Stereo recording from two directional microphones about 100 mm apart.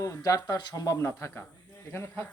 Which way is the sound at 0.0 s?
35° left (ahead or behind).